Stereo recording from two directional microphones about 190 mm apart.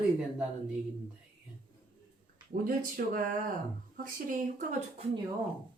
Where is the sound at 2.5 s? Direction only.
45° right (ahead or behind).